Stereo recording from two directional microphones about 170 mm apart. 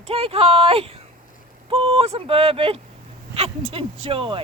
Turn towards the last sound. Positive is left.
turn(degrees=-30)  # may be behind; listen again after turning